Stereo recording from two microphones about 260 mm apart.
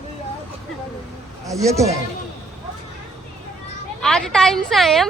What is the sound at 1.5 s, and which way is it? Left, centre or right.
Speech, centre.